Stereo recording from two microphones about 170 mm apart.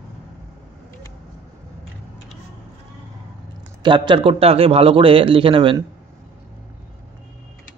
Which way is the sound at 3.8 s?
30° right (ahead or behind).